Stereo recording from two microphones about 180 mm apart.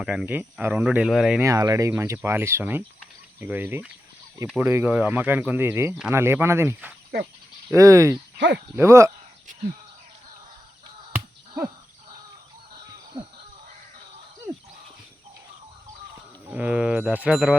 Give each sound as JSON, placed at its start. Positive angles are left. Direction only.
{"t": 0.0, "sound": "speech", "side_deg": -5}
{"t": 1.4, "sound": "speech", "side_deg": -20}
{"t": 8.4, "sound": "speech", "side_deg": -80}
{"t": 8.7, "sound": "speech", "side_deg": -15}
{"t": 11.1, "sound": "finger snapping", "side_deg": -15}
{"t": 16.5, "sound": "speech", "side_deg": -10}